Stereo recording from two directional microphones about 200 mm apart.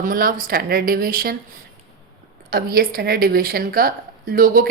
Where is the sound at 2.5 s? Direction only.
50° right (ahead or behind).